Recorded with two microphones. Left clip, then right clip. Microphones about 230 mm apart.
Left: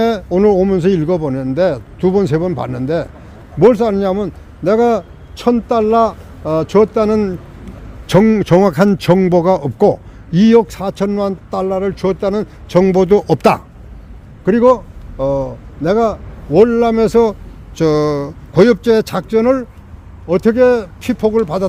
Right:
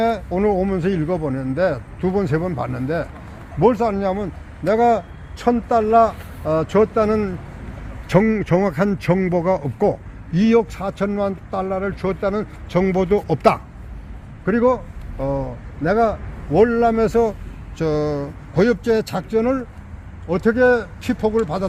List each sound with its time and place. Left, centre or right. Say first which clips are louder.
0.0 s a man's voice: left 6 dB; left